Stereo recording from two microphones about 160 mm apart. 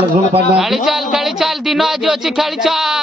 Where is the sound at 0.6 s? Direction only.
Centre (ahead or behind).